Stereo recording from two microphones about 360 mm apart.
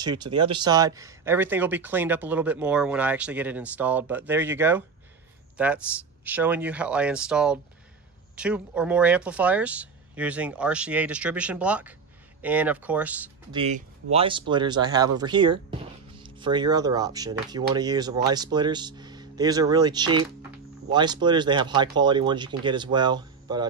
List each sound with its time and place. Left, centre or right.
0.0 s speech: centre
13.6 s speech: centre